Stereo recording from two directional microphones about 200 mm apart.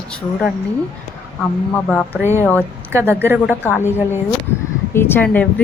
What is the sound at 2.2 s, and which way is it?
A woman's voice, 15° right (ahead or behind).